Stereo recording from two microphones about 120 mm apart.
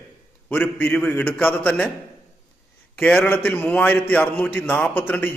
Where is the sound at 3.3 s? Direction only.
15° left (ahead or behind).